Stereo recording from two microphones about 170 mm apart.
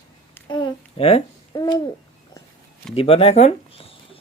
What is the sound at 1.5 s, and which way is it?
Hoot, 25° left (ahead or behind).